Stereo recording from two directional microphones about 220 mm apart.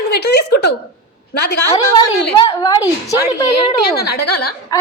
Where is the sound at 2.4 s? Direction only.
20° left (ahead or behind).